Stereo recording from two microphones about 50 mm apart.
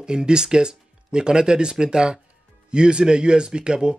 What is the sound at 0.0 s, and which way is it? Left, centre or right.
Speech, centre.